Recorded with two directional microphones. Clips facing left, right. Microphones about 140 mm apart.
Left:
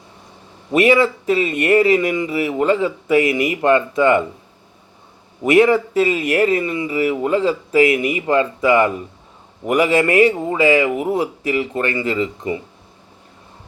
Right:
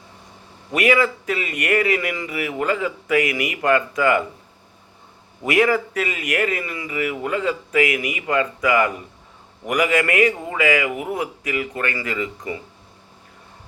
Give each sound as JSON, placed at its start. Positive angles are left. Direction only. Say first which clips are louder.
{"t": 0.7, "sound": "speech", "louder": "left 5 dB", "side_deg": 25}
{"t": 5.4, "sound": "speech", "louder": "left 5 dB", "side_deg": 25}